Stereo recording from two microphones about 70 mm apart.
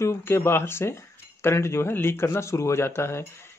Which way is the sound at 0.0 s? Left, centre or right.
Left.